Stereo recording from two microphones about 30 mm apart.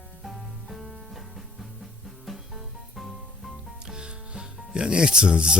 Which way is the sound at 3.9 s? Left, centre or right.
Right.